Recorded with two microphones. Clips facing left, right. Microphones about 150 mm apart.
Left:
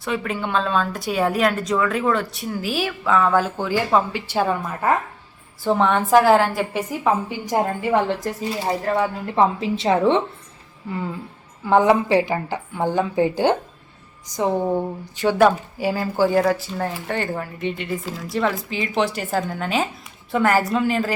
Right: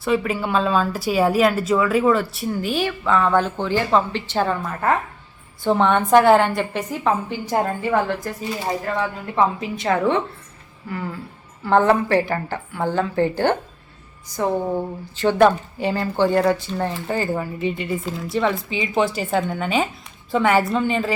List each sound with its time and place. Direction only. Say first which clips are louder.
0.0 s a woman's voice: right 4 dB; 5° right (ahead or behind)